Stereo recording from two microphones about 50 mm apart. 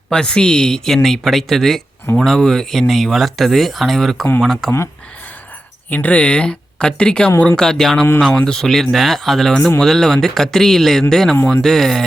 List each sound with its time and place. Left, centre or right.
0.1 s speech: centre
5.9 s speech: left
7.6 s speech: centre